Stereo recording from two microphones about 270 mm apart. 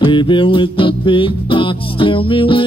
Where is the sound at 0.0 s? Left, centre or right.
Centre.